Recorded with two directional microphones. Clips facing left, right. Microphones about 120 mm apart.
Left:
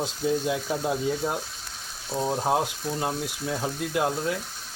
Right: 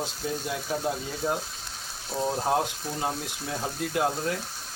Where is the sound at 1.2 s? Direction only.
5° left (ahead or behind).